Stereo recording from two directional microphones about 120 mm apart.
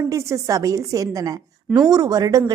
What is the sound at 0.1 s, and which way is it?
A woman's voice, 25° right (ahead or behind).